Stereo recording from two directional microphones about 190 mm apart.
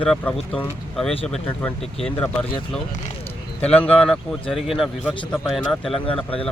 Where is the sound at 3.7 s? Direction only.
5° left (ahead or behind).